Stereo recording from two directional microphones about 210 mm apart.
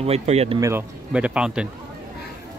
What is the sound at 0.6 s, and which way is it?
Speech, 10° right (ahead or behind).